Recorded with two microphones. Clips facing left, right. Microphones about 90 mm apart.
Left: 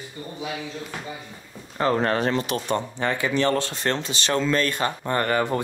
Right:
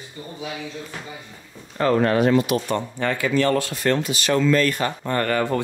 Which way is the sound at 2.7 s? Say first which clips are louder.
Right 1 dB; 20° left (ahead or behind).